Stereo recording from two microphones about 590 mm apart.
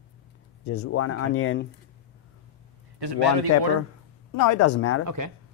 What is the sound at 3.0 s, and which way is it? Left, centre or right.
Speech, right.